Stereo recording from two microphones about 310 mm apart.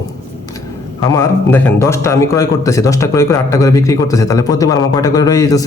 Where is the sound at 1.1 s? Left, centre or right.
Centre.